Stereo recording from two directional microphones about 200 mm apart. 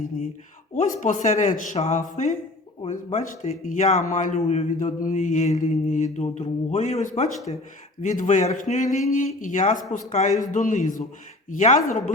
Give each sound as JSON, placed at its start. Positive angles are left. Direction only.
{"t": 0.7, "sound": "speech", "side_deg": 40}